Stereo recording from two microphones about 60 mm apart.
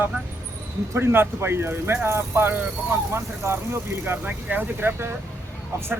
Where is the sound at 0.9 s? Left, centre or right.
Right.